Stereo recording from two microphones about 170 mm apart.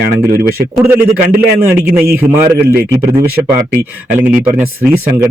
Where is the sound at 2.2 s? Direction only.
15° right (ahead or behind).